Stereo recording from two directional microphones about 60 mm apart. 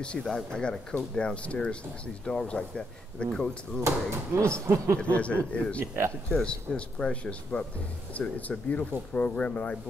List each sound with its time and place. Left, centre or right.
0.0 s speech: centre
3.8 s speech: right
5.1 s speech: left
5.8 s speech: right
6.3 s speech: centre